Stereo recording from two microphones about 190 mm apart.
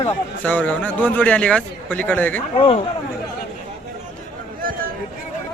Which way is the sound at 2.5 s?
30° left (ahead or behind).